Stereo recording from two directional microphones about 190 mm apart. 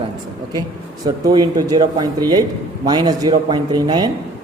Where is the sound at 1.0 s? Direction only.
20° right (ahead or behind).